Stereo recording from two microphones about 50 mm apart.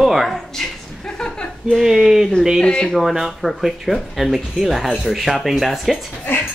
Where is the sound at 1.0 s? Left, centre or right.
Centre.